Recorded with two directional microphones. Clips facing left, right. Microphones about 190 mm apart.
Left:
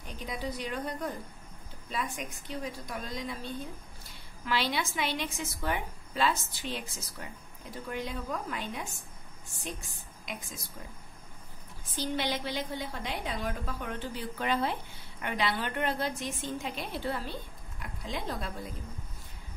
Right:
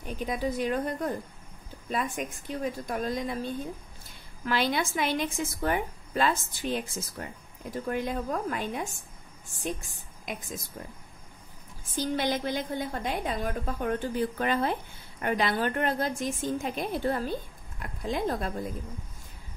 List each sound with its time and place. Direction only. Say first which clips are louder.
0.0 s a woman's voice: right 7 dB; 50° right (ahead or behind)
11.9 s a woman's voice: right 4 dB; 50° right (ahead or behind)